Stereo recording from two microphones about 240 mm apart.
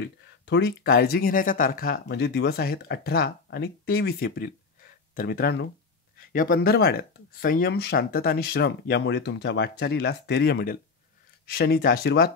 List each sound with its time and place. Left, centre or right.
0.0 s speech: left